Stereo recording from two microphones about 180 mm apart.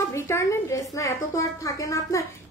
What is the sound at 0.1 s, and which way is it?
A woman's voice, 15° left (ahead or behind).